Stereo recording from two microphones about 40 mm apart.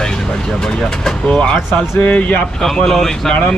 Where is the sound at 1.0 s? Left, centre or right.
Left.